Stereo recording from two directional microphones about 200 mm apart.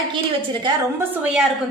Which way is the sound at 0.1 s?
25° right (ahead or behind).